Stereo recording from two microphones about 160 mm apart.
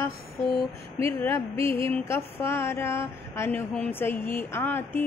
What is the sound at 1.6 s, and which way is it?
Music, 35° right (ahead or behind).